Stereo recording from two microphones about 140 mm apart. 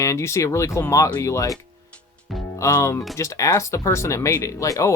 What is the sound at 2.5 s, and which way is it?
Speech, 20° left (ahead or behind).